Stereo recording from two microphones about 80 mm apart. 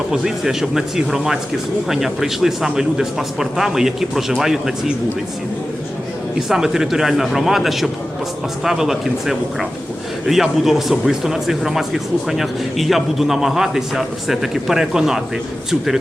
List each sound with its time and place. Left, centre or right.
0.1 s a man's voice: centre
6.5 s a man's voice: centre